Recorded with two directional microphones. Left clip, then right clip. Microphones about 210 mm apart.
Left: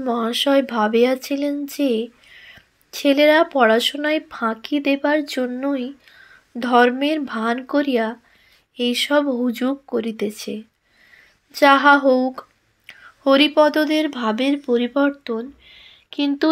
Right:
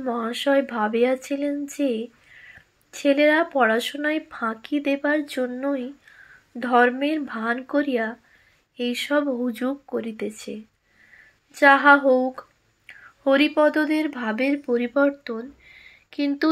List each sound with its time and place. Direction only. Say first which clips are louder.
0.0 s speech: left 5 dB; 40° left (ahead or behind)